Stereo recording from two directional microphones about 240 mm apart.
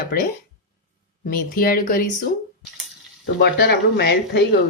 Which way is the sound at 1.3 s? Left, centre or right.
Left.